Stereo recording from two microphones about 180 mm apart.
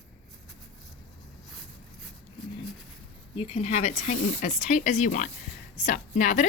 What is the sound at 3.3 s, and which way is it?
A woman's voice, 35° left (ahead or behind).